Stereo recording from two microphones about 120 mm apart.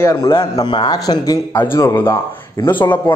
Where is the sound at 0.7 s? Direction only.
35° left (ahead or behind).